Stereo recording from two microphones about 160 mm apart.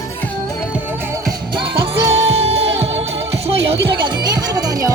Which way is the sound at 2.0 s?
40° right (ahead or behind).